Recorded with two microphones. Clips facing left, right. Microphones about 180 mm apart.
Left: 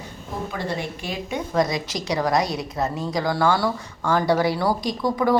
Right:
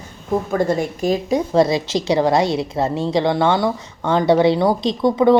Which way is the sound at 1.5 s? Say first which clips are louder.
Right 5 dB; 30° right (ahead or behind).